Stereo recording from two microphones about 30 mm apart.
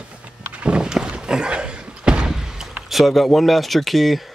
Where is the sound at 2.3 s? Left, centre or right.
Centre.